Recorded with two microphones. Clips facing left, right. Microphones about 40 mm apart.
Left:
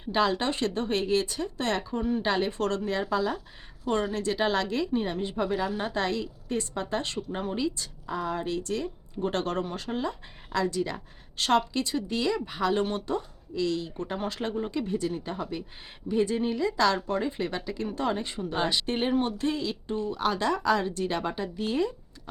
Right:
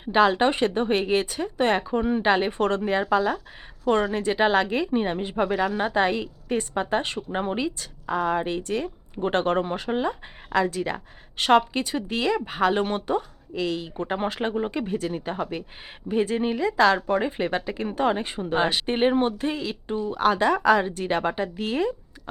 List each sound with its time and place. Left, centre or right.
0.0 s a woman's voice: right